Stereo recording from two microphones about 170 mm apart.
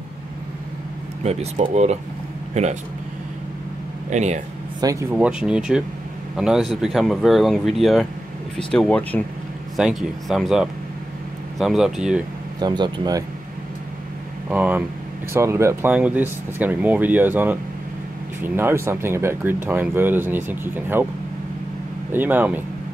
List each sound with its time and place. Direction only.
1.2 s speech: 40° right (ahead or behind)
4.1 s speech: 45° right (ahead or behind)
4.7 s speech: 20° right (ahead or behind)
5.1 s speech: 5° right (ahead or behind)
12.5 s speech: 25° right (ahead or behind)
14.5 s speech: 10° right (ahead or behind)
22.1 s speech: 10° right (ahead or behind)